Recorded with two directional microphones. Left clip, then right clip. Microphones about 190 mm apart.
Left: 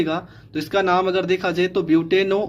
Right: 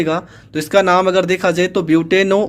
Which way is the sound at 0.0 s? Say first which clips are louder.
Right 5 dB; 20° right (ahead or behind).